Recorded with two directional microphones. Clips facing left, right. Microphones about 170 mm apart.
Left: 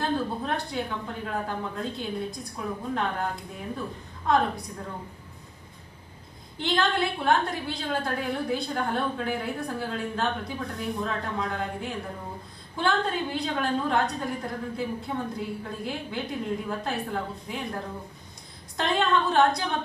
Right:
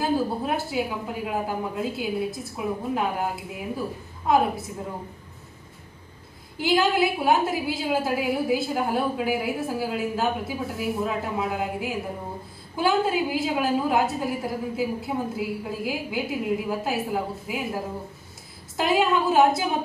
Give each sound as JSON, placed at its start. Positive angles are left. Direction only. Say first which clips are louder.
{"t": 0.0, "sound": "a woman's voice", "louder": "right 4 dB", "side_deg": -5}
{"t": 2.7, "sound": "a woman's voice", "louder": "right 3 dB", "side_deg": -15}
{"t": 6.6, "sound": "a woman's voice", "louder": "right 5 dB", "side_deg": -5}